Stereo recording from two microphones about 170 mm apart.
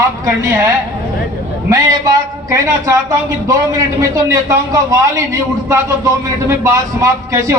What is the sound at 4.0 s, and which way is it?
A man's voice, 20° right (ahead or behind).